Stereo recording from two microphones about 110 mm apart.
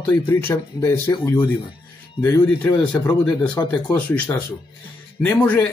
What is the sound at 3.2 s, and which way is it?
Speech, 10° left (ahead or behind).